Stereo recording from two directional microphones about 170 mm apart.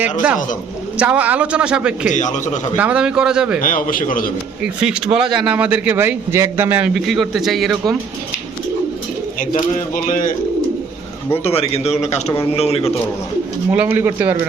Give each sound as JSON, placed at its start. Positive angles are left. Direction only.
{"t": 0.9, "sound": "a man's voice", "side_deg": -5}
{"t": 2.0, "sound": "a man's voice", "side_deg": 45}
{"t": 2.7, "sound": "a man's voice", "side_deg": -10}
{"t": 3.6, "sound": "a man's voice", "side_deg": 50}
{"t": 4.6, "sound": "a man's voice", "side_deg": -5}
{"t": 9.9, "sound": "a man's voice", "side_deg": 50}
{"t": 11.4, "sound": "a man's voice", "side_deg": 35}
{"t": 13.7, "sound": "a man's voice", "side_deg": -10}